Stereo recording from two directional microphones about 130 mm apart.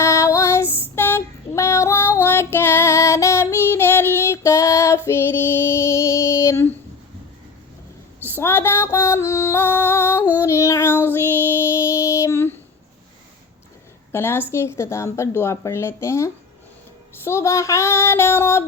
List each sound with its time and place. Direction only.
0.0 s female singing: 25° left (ahead or behind)
8.4 s music: 20° left (ahead or behind)
10.3 s child singing: 20° left (ahead or behind)
14.1 s speech: 20° left (ahead or behind)